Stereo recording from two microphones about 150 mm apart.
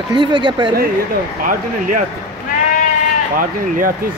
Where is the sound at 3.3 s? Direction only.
65° right (ahead or behind).